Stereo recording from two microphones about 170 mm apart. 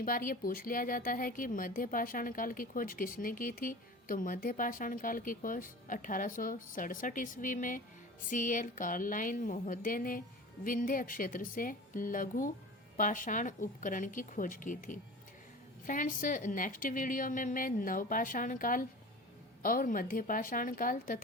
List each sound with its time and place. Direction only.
0.0 s a woman's voice: 55° left (ahead or behind)